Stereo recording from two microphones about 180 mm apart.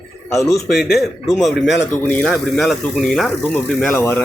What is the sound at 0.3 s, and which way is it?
Speech, 15° left (ahead or behind).